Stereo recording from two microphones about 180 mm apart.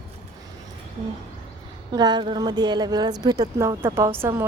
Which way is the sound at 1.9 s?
25° right (ahead or behind).